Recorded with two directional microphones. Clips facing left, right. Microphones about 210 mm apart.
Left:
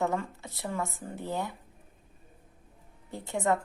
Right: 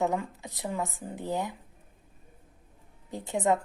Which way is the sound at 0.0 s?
15° right (ahead or behind).